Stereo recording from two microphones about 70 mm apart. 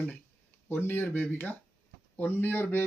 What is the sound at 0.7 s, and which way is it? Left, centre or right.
Speech, left.